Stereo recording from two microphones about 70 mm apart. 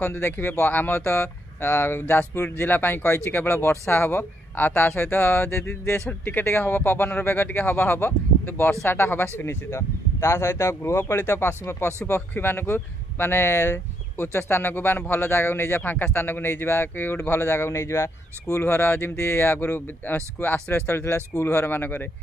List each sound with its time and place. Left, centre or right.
0.0 s speech: left
18.6 s speech: left